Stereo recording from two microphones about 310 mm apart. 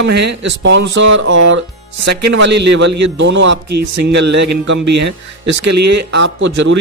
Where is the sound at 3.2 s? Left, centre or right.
Right.